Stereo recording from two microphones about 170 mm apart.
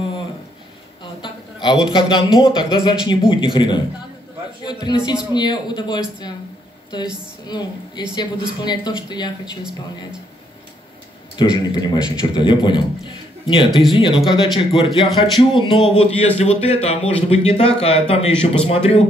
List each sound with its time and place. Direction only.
1.2 s a man's voice: 25° left (ahead or behind)
7.4 s a man's voice: 25° left (ahead or behind)
11.3 s a man's voice: 25° left (ahead or behind)